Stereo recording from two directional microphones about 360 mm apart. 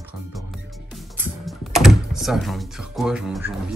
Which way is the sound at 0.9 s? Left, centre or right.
Centre.